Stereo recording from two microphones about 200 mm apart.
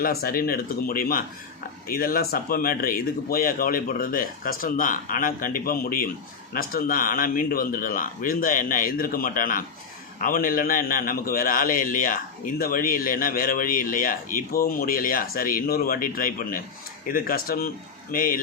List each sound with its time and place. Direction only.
0.0 s a man's voice: 50° left (ahead or behind)